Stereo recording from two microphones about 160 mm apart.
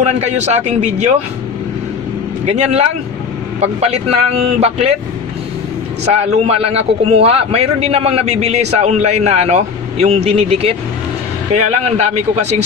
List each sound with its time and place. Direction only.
0.0 s a man's voice: 45° right (ahead or behind)
2.4 s a man's voice: 45° right (ahead or behind)
6.0 s a man's voice: 40° right (ahead or behind)